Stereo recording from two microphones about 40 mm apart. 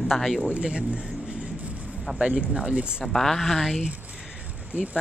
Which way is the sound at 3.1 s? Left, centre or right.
Centre.